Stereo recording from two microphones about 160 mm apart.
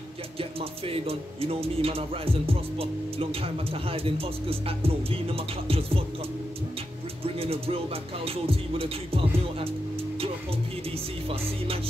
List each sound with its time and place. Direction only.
0.4 s speech: 35° right (ahead or behind)
7.2 s speech: 35° right (ahead or behind)